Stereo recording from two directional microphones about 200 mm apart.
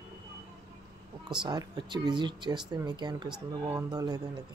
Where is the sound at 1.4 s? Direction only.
20° right (ahead or behind).